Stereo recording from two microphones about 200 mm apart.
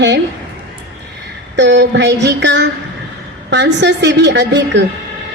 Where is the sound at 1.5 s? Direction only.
60° right (ahead or behind).